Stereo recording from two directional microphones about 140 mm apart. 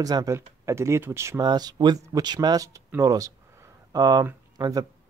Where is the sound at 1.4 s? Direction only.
30° right (ahead or behind).